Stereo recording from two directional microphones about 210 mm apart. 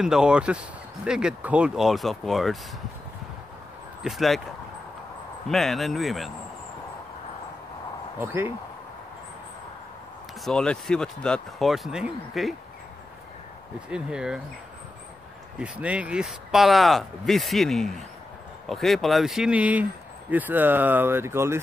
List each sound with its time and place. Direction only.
0.0 s speech: 5° right (ahead or behind)
4.0 s speech: centre (ahead or behind)
5.5 s speech: centre (ahead or behind)
8.2 s speech: 10° right (ahead or behind)
10.4 s speech: 5° left (ahead or behind)
13.8 s speech: 5° right (ahead or behind)
15.6 s speech: 5° right (ahead or behind)